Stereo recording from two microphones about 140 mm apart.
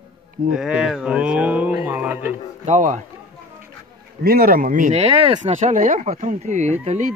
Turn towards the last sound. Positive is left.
turn(degrees=-55)  # may be behind; listen again after turning